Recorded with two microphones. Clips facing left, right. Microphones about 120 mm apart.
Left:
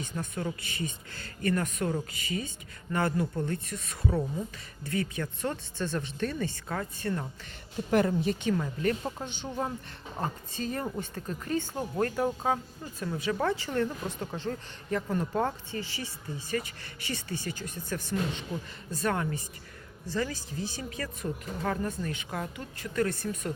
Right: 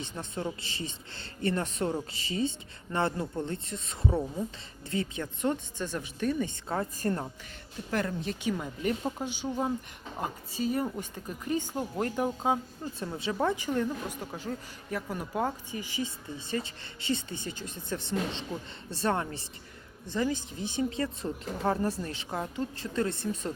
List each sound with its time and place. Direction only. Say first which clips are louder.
0.0 s speech: left 1 dB; 25° right (ahead or behind)
7.0 s speech: right 1 dB; 40° right (ahead or behind)
7.9 s speech: left 6 dB; 15° left (ahead or behind)
8.4 s speech: left 2 dB; 15° right (ahead or behind)